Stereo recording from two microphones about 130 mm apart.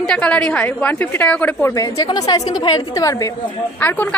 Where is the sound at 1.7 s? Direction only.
30° left (ahead or behind).